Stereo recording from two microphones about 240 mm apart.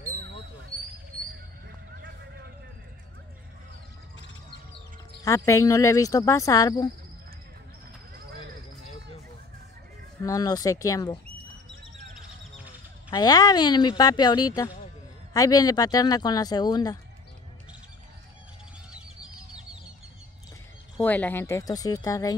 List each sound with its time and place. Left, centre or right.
4.5 s speech: centre
10.2 s speech: centre
13.1 s speech: centre
21.0 s speech: centre